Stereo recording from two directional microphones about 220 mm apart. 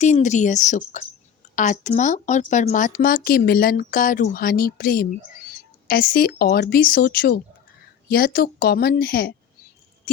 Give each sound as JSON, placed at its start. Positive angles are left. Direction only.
{"t": 0.0, "sound": "speech", "side_deg": 35}